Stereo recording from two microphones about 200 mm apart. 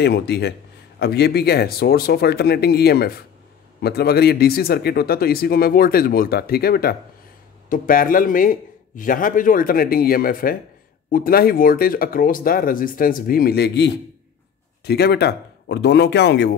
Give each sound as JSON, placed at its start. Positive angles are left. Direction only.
{"t": 0.0, "sound": "a man's voice", "side_deg": 55}